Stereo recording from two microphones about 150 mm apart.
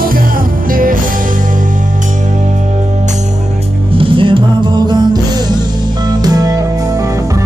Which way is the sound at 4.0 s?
35° right (ahead or behind).